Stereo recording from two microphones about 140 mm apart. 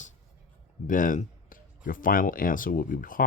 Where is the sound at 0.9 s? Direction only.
70° left (ahead or behind).